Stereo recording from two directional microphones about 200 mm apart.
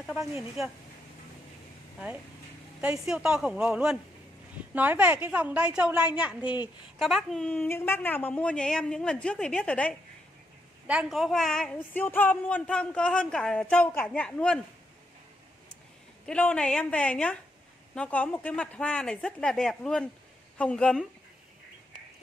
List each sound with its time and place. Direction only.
0.0 s a sound: centre (ahead or behind)
2.8 s a woman's voice: 5° right (ahead or behind)
16.3 s a woman's voice: 5° left (ahead or behind)